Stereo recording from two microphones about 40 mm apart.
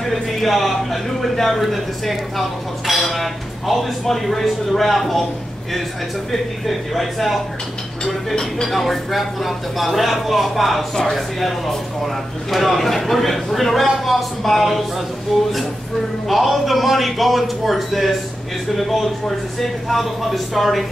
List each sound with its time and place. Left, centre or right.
0.0 s speech: centre
6.3 s speech: centre
8.0 s speech: centre